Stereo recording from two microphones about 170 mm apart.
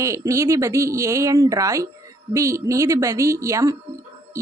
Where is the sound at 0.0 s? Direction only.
15° right (ahead or behind).